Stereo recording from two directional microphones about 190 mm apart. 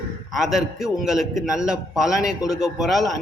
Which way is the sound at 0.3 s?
Centre (ahead or behind).